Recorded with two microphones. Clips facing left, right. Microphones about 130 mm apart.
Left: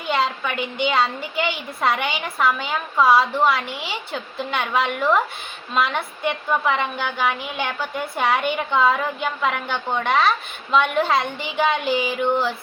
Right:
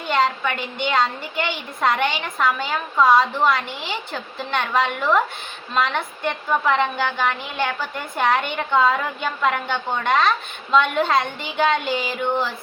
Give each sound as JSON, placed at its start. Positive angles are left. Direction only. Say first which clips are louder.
{"t": 0.1, "sound": "a woman's voice", "louder": "right 2 dB", "side_deg": 5}